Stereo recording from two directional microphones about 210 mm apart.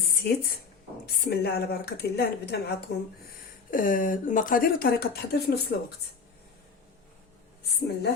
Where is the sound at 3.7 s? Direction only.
40° left (ahead or behind).